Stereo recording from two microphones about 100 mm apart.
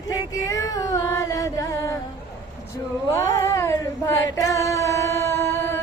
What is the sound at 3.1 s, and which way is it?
Female singing, 30° left (ahead or behind).